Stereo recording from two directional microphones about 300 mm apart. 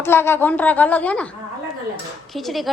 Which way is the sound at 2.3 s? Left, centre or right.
Centre.